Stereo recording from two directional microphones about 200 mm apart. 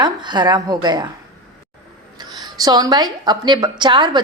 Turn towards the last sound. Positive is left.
turn(degrees=-20)  # may be behind; listen again after turning